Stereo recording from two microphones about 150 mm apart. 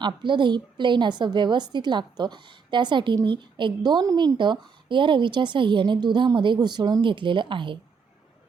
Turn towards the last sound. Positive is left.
turn(degrees=-35)  # may be behind; listen again after turning